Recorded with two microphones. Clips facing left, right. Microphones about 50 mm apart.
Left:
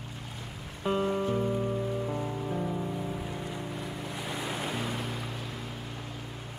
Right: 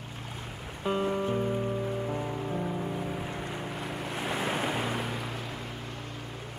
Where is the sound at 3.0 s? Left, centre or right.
Right.